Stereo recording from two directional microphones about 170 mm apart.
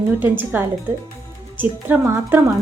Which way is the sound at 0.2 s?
10° right (ahead or behind).